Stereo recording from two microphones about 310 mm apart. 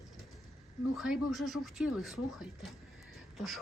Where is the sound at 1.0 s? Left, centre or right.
Centre.